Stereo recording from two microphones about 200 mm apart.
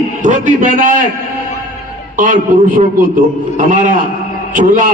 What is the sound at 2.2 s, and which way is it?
A man's voice, 40° right (ahead or behind).